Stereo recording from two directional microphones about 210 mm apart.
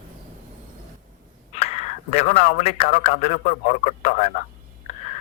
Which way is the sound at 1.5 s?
30° left (ahead or behind).